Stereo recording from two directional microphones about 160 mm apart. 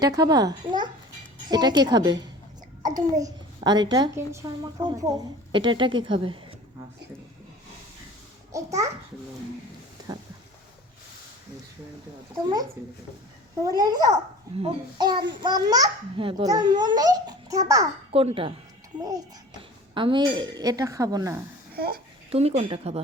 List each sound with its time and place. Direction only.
0.0 s a child's voice: 25° right (ahead or behind)
8.5 s a child's voice: 20° right (ahead or behind)
12.8 s a child's voice: 20° right (ahead or behind)
18.1 s a child's voice: 35° right (ahead or behind)
21.8 s speech: 70° right (ahead or behind)
22.3 s speech: 40° right (ahead or behind)